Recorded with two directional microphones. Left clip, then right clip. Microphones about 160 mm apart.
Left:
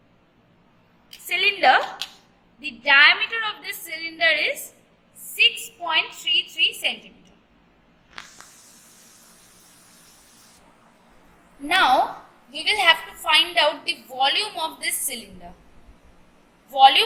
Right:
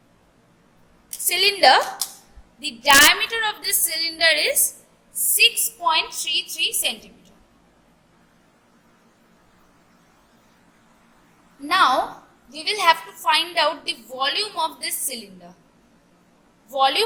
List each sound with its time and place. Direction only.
1.3 s a woman's voice: 75° right (ahead or behind)
2.6 s a woman's voice: 85° right
11.7 s a woman's voice: 70° right (ahead or behind)
16.7 s a woman's voice: 70° right (ahead or behind)